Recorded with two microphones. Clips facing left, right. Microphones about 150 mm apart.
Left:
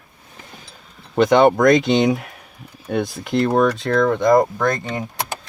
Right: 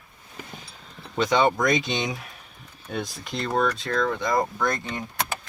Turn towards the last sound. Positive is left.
turn(degrees=50)  # may be behind; listen again after turning